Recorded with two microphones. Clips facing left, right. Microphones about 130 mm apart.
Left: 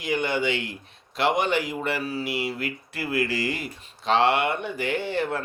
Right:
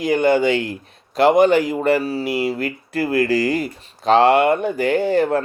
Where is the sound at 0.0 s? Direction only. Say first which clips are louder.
Right 9 dB; 40° right (ahead or behind).